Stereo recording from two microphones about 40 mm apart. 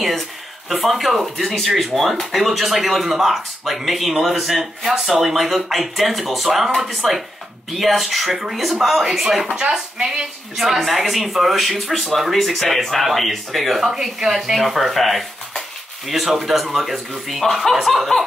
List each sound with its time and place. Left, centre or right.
0.7 s speech: centre
9.6 s speech: centre